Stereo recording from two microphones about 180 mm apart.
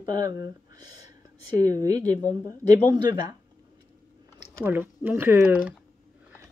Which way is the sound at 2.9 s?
25° right (ahead or behind).